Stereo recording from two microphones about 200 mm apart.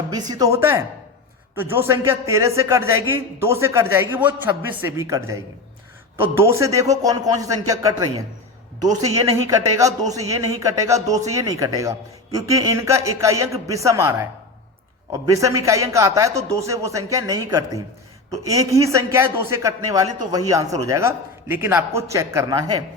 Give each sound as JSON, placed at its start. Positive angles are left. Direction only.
{"t": 0.1, "sound": "a man's voice", "side_deg": -20}